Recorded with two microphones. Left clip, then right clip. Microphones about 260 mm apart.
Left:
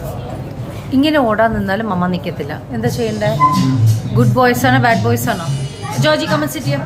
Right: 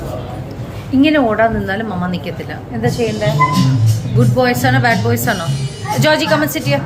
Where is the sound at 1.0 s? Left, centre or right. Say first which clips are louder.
Right 1 dB; left.